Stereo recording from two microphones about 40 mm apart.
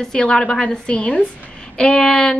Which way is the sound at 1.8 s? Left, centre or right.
Centre.